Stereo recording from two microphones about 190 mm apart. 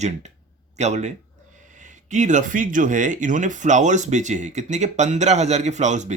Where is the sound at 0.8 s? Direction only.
35° right (ahead or behind).